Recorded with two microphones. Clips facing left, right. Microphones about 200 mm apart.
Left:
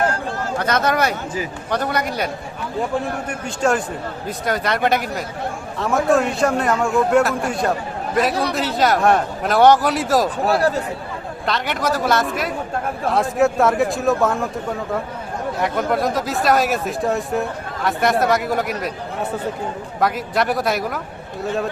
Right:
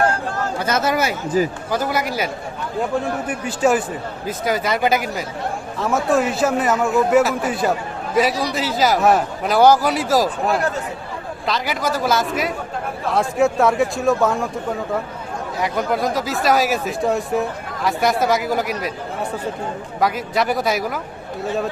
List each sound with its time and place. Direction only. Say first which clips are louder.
0.6 s a man's voice: left 1 dB; 5° right (ahead or behind)
1.4 s a man's voice: right 8 dB; 40° right (ahead or behind)
1.7 s a man's voice: left 3 dB; 5° right (ahead or behind)
8.3 s a man's voice: left 1 dB; 55° left (ahead or behind)
8.5 s a man's voice: even; centre (ahead or behind)
20.0 s a man's voice: even; centre (ahead or behind)